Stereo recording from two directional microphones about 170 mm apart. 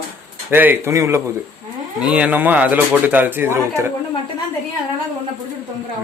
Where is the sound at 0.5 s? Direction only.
10° right (ahead or behind).